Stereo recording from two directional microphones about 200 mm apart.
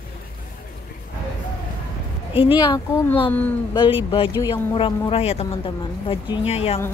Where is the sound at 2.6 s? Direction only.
20° left (ahead or behind).